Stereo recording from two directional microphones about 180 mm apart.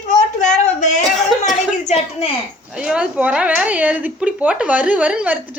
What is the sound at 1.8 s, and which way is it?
Speech, 35° left (ahead or behind).